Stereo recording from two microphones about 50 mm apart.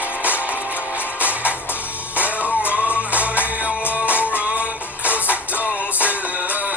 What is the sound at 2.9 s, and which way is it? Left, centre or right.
Music, right.